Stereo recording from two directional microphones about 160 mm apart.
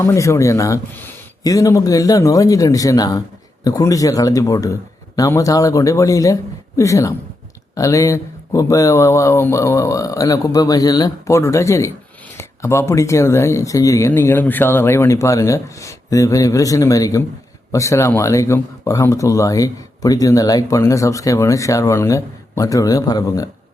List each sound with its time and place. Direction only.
0.0 s speech: 20° left (ahead or behind)